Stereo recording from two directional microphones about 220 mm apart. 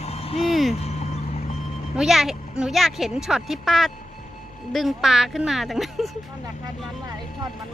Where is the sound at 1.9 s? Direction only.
Centre (ahead or behind).